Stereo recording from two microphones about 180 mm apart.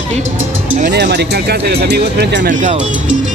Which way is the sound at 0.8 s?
70° right (ahead or behind).